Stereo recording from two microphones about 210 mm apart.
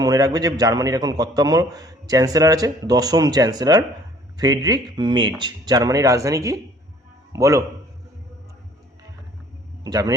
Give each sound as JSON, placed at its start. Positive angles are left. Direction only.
{"t": 0.0, "sound": "a man's voice", "side_deg": -20}
{"t": 9.8, "sound": "a man's voice", "side_deg": -20}